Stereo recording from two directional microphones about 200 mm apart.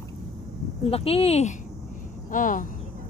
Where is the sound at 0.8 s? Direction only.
30° left (ahead or behind).